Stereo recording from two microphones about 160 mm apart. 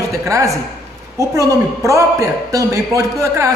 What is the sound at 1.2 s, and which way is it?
A man's voice, 20° right (ahead or behind).